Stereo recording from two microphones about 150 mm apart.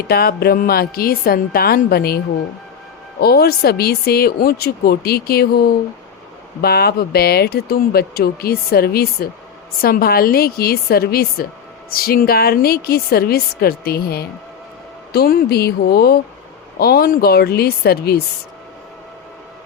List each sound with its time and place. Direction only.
0.1 s speech: 90° left
11.9 s speech: 80° left